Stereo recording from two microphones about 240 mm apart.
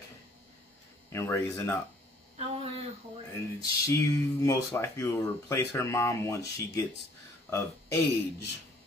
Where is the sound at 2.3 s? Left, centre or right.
Right.